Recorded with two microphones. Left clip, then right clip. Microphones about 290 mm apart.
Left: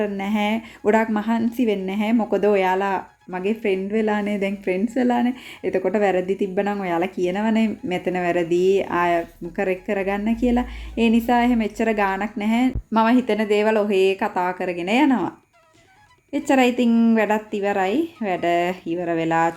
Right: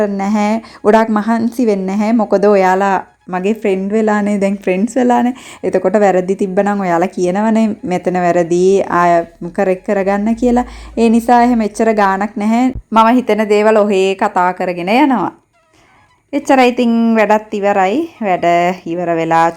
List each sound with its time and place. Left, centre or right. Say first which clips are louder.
0.0 s a woman's voice: right 8 dB; right
12.9 s a woman's voice: right 9 dB; centre
16.5 s a woman's voice: right 8 dB; centre